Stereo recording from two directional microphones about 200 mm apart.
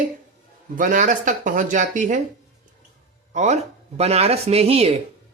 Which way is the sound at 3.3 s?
35° right (ahead or behind).